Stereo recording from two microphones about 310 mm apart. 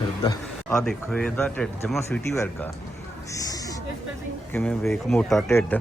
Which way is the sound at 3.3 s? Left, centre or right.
Centre.